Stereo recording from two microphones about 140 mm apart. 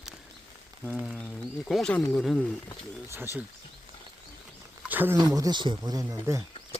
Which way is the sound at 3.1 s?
15° right (ahead or behind).